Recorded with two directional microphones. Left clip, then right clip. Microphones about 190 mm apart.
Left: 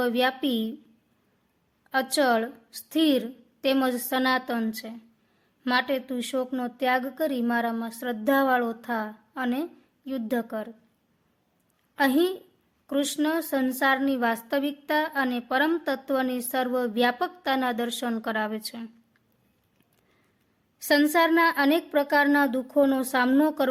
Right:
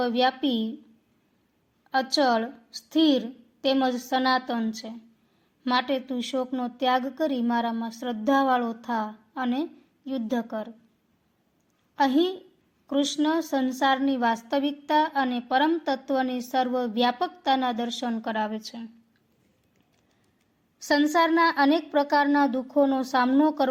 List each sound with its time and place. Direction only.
0.0 s a woman's voice: 25° left (ahead or behind)
1.9 s a woman's voice: 25° left (ahead or behind)
11.9 s a woman's voice: 25° left (ahead or behind)
20.7 s a woman's voice: 25° left (ahead or behind)